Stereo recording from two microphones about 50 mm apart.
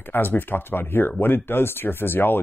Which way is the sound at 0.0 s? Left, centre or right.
Left.